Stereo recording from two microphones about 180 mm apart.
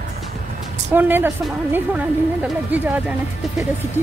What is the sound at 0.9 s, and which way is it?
A woman's voice, 10° right (ahead or behind).